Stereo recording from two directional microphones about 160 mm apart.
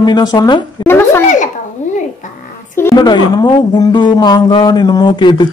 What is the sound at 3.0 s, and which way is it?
Speech, 25° left (ahead or behind).